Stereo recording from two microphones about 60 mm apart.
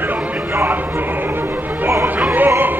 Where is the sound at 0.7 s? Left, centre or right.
Right.